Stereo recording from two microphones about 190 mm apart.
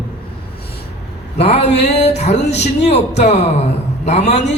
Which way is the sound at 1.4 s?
35° left (ahead or behind).